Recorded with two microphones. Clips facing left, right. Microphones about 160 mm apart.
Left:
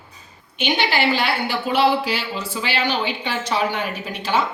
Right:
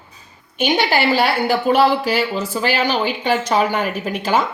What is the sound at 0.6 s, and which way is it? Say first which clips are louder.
Speech: right 4 dB; 45° right (ahead or behind).